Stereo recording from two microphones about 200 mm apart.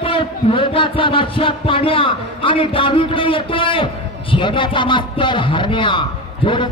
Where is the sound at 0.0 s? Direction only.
25° left (ahead or behind).